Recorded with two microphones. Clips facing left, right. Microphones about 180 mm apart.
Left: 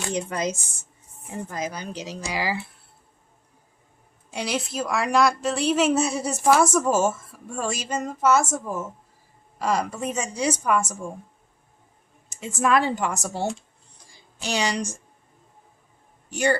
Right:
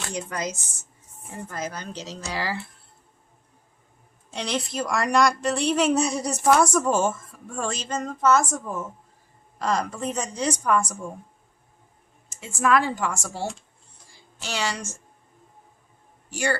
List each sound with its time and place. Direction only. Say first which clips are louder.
0.1 s a woman's voice: left 4 dB; 25° left (ahead or behind)
1.5 s a woman's voice: even; 15° left (ahead or behind)
4.3 s a woman's voice: left 1 dB; 10° left (ahead or behind)
12.3 s a woman's voice: even; 20° left (ahead or behind)
16.3 s a woman's voice: left 4 dB; 20° left (ahead or behind)